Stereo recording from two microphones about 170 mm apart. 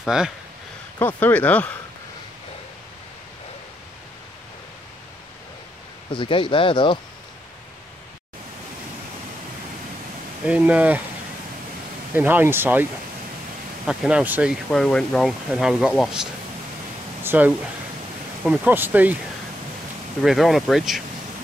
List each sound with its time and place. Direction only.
0.0 s speech: 5° right (ahead or behind)
0.9 s speech: 10° left (ahead or behind)
6.1 s speech: 30° left (ahead or behind)
10.4 s speech: 10° right (ahead or behind)
12.1 s speech: 10° right (ahead or behind)
13.8 s speech: 5° right (ahead or behind)
17.2 s a sound: 15° right (ahead or behind)
18.4 s speech: 5° right (ahead or behind)
20.2 s speech: centre (ahead or behind)